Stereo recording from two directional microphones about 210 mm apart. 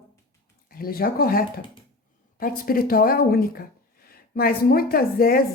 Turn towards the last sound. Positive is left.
turn(degrees=45)  # may be behind; listen again after turning